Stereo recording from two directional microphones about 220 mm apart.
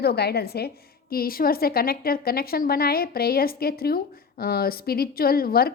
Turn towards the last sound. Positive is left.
turn(degrees=45)  # may be behind; listen again after turning